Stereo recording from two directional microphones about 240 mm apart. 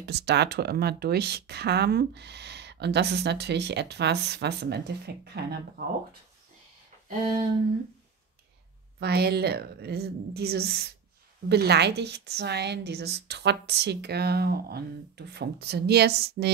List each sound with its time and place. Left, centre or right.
0.0 s speech: right
9.0 s speech: right